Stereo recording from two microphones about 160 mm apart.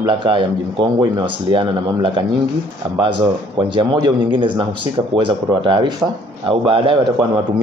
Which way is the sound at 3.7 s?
30° right (ahead or behind).